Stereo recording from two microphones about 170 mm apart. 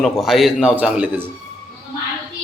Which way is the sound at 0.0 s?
Centre (ahead or behind).